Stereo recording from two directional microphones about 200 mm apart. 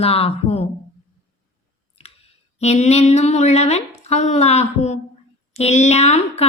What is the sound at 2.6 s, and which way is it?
A woman's voice, 35° left (ahead or behind).